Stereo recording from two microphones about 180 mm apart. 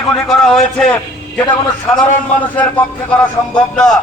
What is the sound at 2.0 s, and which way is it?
A man's voice, 10° left (ahead or behind).